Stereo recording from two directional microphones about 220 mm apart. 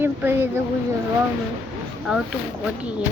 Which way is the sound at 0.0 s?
10° right (ahead or behind).